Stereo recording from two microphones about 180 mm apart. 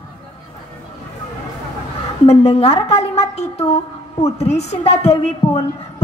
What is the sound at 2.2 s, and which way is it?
A woman's voice, 35° left (ahead or behind).